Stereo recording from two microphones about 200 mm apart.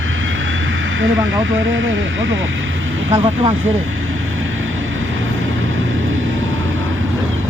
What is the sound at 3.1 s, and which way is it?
Speech, 30° right (ahead or behind).